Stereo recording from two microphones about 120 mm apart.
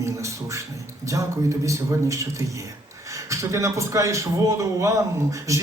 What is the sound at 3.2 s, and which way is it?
A man's voice, 25° right (ahead or behind).